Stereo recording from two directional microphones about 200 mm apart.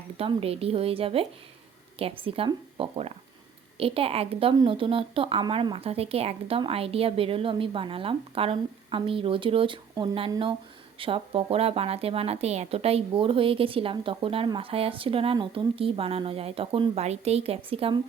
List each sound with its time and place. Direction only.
0.2 s a woman's voice: 30° right (ahead or behind)